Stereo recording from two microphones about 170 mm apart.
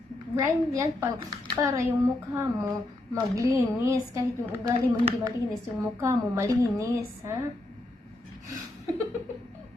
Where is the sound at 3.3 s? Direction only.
15° right (ahead or behind).